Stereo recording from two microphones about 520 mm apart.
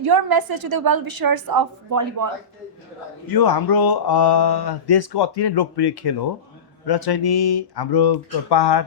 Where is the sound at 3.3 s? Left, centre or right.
Left.